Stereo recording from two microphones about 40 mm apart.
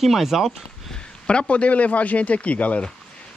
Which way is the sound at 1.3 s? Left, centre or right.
Left.